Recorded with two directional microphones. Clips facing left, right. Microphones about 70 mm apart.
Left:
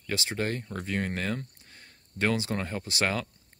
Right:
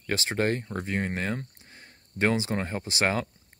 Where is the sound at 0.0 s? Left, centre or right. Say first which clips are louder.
Right 4 dB; right.